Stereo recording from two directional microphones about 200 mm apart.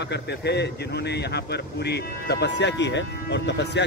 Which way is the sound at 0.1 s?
55° left (ahead or behind).